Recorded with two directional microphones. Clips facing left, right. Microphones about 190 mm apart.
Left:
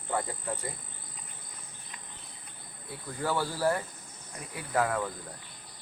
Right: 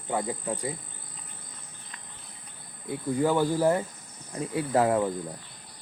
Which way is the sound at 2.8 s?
15° right (ahead or behind).